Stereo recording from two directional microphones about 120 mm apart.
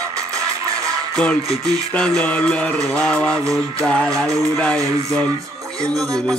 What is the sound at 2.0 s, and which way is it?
Music, 10° left (ahead or behind).